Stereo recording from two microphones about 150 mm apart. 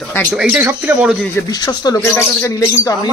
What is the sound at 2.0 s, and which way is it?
Speech, 15° left (ahead or behind).